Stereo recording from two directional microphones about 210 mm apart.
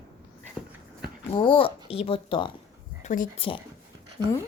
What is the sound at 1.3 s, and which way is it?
Speech, 25° left (ahead or behind).